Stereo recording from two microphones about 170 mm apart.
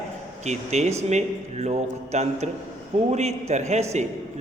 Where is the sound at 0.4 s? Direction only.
40° right (ahead or behind).